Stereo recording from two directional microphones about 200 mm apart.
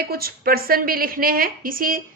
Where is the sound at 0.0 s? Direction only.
50° right (ahead or behind).